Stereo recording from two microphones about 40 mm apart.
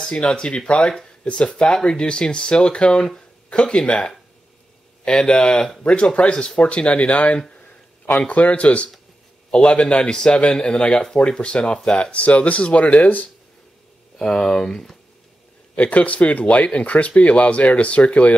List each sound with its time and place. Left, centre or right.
0.1 s speech: left
14.1 s speech: centre
15.7 s speech: left